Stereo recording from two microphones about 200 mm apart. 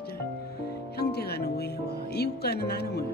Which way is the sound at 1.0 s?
55° left (ahead or behind).